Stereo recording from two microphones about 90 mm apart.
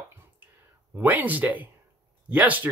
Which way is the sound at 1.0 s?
20° right (ahead or behind).